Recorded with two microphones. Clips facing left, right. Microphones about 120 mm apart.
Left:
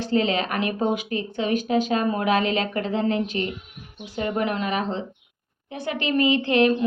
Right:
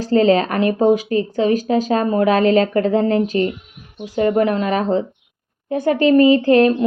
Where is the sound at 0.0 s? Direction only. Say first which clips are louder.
Right 8 dB; 40° right (ahead or behind).